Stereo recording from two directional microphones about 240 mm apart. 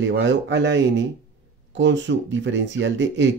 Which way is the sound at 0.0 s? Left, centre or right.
Right.